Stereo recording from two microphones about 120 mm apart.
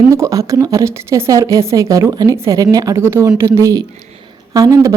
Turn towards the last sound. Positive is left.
turn(degrees=-25)  # may be behind; listen again after turning